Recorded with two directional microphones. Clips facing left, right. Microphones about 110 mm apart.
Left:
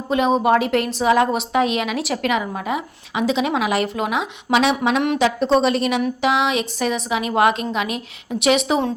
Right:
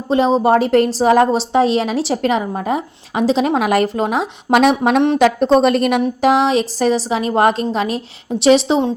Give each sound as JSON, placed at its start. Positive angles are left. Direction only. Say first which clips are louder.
{"t": 0.1, "sound": "a woman's voice", "louder": "right 3 dB", "side_deg": -30}
{"t": 6.2, "sound": "a woman's voice", "louder": "right 7 dB", "side_deg": -40}